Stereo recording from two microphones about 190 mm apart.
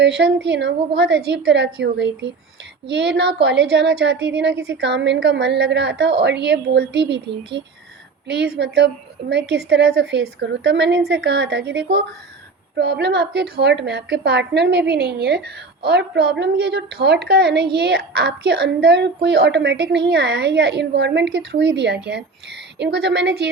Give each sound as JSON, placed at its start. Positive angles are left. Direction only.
{"t": 0.0, "sound": "a woman's voice", "side_deg": -65}
{"t": 3.4, "sound": "a woman's voice", "side_deg": -65}